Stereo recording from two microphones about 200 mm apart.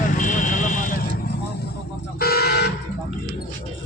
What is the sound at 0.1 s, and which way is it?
Vehicle, 40° left (ahead or behind).